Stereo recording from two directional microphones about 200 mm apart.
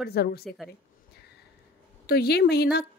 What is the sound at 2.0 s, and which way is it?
Speech, 50° left (ahead or behind).